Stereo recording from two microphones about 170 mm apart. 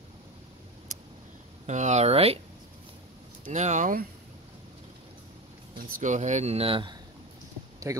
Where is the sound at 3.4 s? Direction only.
45° right (ahead or behind).